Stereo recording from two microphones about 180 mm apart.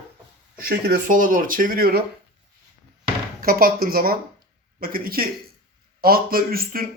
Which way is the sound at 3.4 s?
55° right (ahead or behind).